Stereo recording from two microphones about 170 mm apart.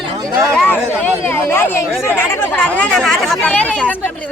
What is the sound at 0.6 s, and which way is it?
Speech, 10° left (ahead or behind).